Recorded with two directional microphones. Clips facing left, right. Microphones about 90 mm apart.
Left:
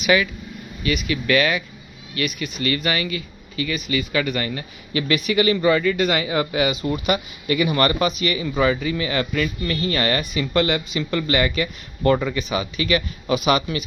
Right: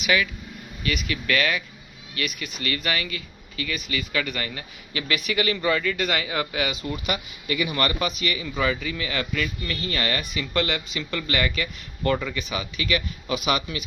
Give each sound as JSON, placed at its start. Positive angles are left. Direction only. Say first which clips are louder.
{"t": 0.0, "sound": "speech", "louder": "left 5 dB", "side_deg": 30}
{"t": 0.8, "sound": "a man's voice", "louder": "left 5 dB", "side_deg": 10}
{"t": 2.1, "sound": "speech", "louder": "left 5 dB", "side_deg": 0}
{"t": 5.2, "sound": "a man's voice", "louder": "left 6 dB", "side_deg": 10}
{"t": 7.1, "sound": "speech", "louder": "left 6 dB", "side_deg": 45}
{"t": 10.2, "sound": "speech", "louder": "left 5 dB", "side_deg": 30}